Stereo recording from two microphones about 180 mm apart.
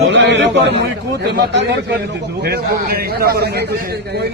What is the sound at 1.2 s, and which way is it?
Speech, 65° right (ahead or behind).